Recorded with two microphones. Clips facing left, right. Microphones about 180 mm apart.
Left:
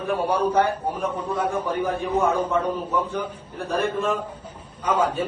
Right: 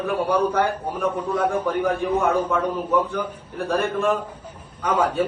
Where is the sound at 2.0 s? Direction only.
10° right (ahead or behind).